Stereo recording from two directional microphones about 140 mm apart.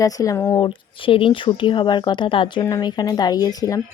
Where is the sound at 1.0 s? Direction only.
40° left (ahead or behind).